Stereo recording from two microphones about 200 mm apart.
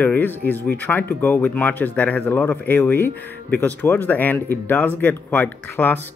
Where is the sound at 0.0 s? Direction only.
10° left (ahead or behind).